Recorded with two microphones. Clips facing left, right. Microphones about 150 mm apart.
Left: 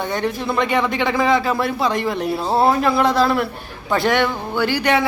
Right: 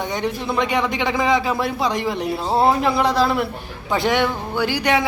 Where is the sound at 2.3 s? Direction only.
5° left (ahead or behind).